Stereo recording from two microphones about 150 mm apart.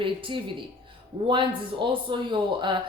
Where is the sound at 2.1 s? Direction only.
30° right (ahead or behind).